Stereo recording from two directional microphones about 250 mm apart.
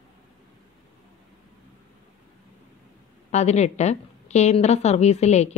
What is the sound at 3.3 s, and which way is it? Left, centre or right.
A woman's voice, left.